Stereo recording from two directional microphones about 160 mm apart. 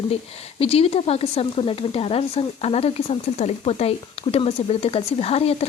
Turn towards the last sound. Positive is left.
turn(degrees=40)  # may be behind; listen again after turning